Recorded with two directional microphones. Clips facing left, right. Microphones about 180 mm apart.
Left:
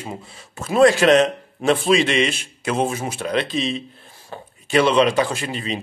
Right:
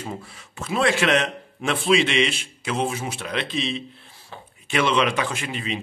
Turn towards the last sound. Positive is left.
turn(degrees=35)  # may be behind; listen again after turning